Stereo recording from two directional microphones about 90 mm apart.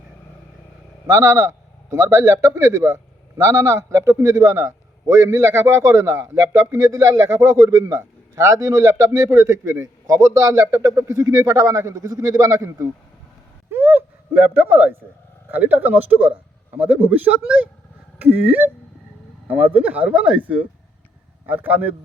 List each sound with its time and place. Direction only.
1.0 s a man's voice: 35° right (ahead or behind)
13.7 s a sound: 25° right (ahead or behind)
15.4 s speech: 20° right (ahead or behind)